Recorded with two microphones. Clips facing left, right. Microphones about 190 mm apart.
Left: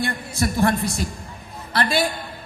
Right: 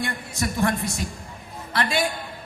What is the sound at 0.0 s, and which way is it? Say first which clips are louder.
A man's voice: left 4 dB; 35° left (ahead or behind).